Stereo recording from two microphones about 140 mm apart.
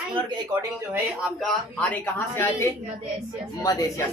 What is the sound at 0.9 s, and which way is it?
Speech, centre (ahead or behind).